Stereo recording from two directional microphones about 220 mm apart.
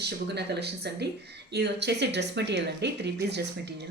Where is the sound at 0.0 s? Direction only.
50° right (ahead or behind).